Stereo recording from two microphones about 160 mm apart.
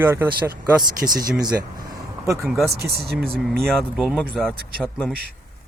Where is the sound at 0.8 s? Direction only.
60° right (ahead or behind).